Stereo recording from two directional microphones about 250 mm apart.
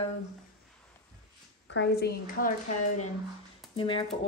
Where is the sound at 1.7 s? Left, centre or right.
Left.